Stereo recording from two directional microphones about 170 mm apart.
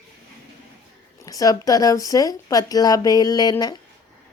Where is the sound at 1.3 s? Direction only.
20° left (ahead or behind).